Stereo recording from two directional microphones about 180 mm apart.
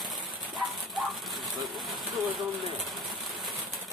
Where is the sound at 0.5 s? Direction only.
Centre (ahead or behind).